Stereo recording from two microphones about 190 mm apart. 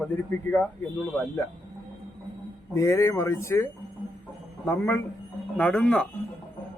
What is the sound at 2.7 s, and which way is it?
Speech, 15° left (ahead or behind).